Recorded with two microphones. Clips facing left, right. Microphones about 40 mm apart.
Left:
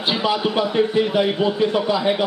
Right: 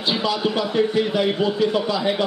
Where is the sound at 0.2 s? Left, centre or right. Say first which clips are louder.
Left 2 dB; left.